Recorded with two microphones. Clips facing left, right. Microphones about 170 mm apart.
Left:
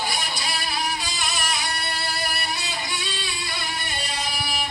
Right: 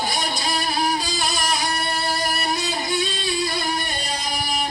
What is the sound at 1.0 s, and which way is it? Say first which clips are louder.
Music: right 5 dB; 35° right (ahead or behind).